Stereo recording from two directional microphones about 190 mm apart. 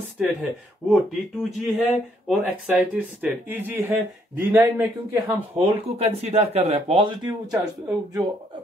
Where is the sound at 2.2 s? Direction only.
5° right (ahead or behind).